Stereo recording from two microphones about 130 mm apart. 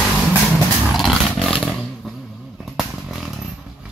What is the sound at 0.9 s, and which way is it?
Roar, centre (ahead or behind).